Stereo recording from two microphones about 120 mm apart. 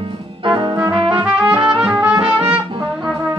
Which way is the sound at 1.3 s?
10° right (ahead or behind).